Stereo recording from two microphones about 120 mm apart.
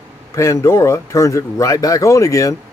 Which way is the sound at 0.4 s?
25° left (ahead or behind).